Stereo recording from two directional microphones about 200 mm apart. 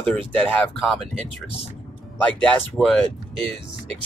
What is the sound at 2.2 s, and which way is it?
Speech, 5° left (ahead or behind).